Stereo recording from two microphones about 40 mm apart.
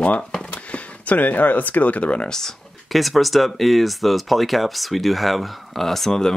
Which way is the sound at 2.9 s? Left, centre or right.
Centre.